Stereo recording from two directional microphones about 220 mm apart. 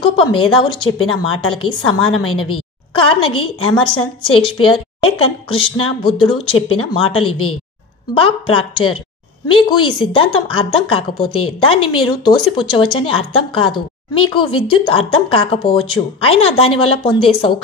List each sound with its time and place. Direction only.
0.1 s a woman's voice: 25° left (ahead or behind)